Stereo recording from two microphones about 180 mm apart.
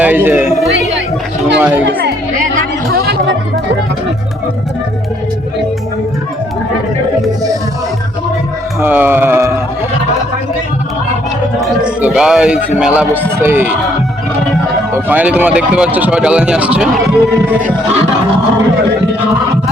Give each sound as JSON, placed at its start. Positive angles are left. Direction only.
{"t": 0.0, "sound": "a sound", "side_deg": -10}
{"t": 1.5, "sound": "chatter", "side_deg": -5}
{"t": 2.4, "sound": "music", "side_deg": -55}
{"t": 8.8, "sound": "music", "side_deg": -10}
{"t": 11.6, "sound": "music", "side_deg": -5}
{"t": 12.8, "sound": "speech", "side_deg": -5}
{"t": 14.9, "sound": "speech", "side_deg": -10}